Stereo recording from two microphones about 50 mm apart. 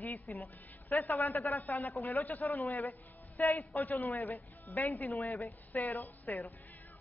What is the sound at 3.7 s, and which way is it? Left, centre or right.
Speech, left.